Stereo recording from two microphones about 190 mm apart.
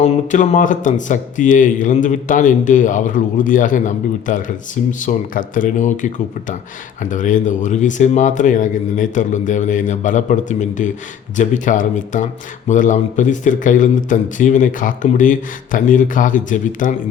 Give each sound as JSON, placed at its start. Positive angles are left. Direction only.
{"t": 0.0, "sound": "speech", "side_deg": 40}